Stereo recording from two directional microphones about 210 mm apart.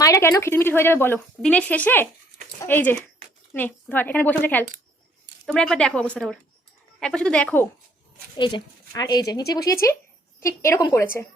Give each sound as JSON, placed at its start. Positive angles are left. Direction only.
{"t": 0.0, "sound": "speech", "side_deg": 15}
{"t": 8.4, "sound": "speech", "side_deg": 20}